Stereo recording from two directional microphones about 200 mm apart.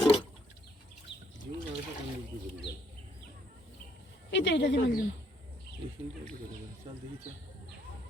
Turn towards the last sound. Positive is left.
turn(degrees=-30)  # may be behind; listen again after turning